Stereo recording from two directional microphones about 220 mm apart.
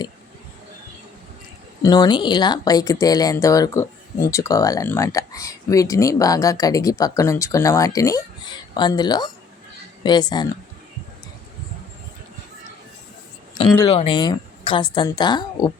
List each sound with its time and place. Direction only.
1.8 s a woman's voice: 15° left (ahead or behind)
13.6 s a woman's voice: 20° left (ahead or behind)